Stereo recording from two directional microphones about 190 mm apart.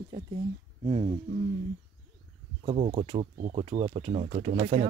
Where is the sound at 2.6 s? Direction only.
35° right (ahead or behind).